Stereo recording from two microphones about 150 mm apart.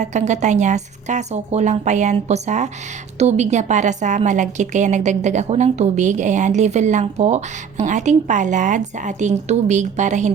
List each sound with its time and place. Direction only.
0.0 s a woman's voice: 50° right (ahead or behind)